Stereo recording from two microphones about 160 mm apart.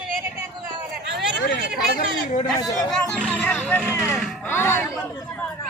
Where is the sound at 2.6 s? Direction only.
20° left (ahead or behind).